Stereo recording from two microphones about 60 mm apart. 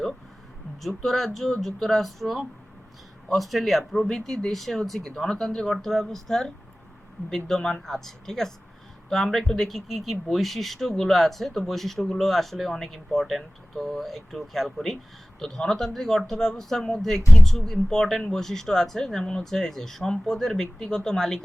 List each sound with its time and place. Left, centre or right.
0.8 s speech: centre